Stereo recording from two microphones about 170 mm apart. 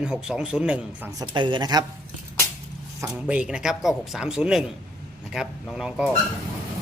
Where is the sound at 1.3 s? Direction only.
25° right (ahead or behind).